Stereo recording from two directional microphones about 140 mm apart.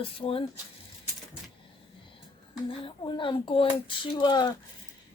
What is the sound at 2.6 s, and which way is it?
Speech, 35° left (ahead or behind).